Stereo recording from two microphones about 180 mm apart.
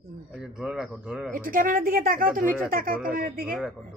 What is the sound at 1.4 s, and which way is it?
A woman's voice, 50° right (ahead or behind).